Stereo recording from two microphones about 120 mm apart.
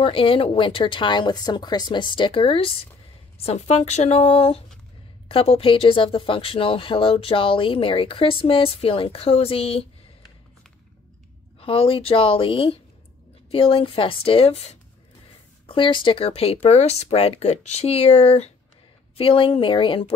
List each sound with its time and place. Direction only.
0.0 s speech: 50° left (ahead or behind)
3.4 s speech: 60° left (ahead or behind)
11.6 s speech: 50° left (ahead or behind)
15.6 s speech: 45° left (ahead or behind)
16.6 s speech: 65° left (ahead or behind)
19.1 s speech: 50° left (ahead or behind)